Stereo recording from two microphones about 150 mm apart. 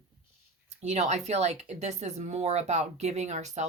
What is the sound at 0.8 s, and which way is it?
Speech, 50° right (ahead or behind).